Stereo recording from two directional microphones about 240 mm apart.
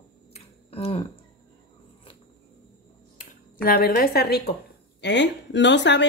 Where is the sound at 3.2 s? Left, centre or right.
Left.